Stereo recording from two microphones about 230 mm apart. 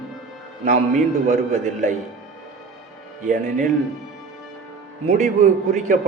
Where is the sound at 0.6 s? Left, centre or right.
Right.